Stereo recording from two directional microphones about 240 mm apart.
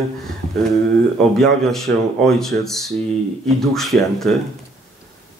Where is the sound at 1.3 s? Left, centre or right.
Centre.